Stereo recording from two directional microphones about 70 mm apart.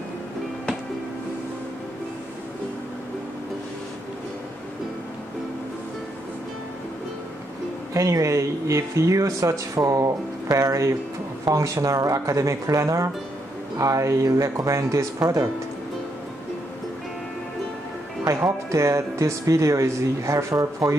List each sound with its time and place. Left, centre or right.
7.9 s speech: right
18.2 s speech: right